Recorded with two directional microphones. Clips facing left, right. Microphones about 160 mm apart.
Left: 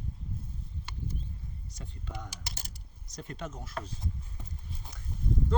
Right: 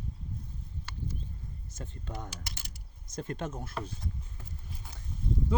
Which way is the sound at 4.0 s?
20° left (ahead or behind).